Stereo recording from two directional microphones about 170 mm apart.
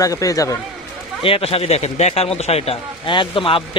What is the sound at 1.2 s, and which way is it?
A man's voice, 35° left (ahead or behind).